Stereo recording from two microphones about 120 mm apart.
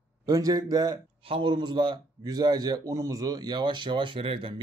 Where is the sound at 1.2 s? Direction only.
45° right (ahead or behind).